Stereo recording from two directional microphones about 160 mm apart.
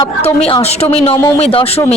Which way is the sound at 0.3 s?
40° left (ahead or behind).